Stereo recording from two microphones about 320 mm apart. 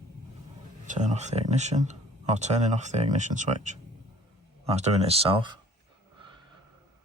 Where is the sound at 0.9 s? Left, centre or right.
Right.